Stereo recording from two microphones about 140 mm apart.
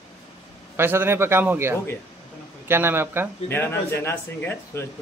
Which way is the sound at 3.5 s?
15° left (ahead or behind).